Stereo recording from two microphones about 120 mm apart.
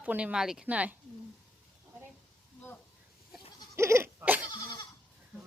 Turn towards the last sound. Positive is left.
turn(degrees=-15)  # may be behind; listen again after turning